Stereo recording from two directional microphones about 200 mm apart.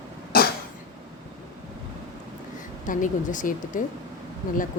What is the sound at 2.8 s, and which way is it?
A woman's voice, 40° left (ahead or behind).